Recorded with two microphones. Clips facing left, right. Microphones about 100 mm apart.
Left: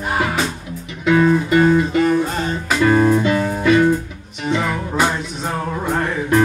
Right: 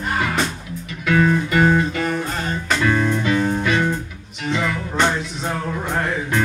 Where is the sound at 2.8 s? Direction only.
40° left (ahead or behind).